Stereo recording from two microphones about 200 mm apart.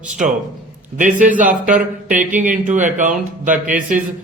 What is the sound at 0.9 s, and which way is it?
Speech, 40° right (ahead or behind).